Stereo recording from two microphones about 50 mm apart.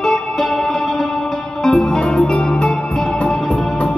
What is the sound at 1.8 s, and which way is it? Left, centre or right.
Music, left.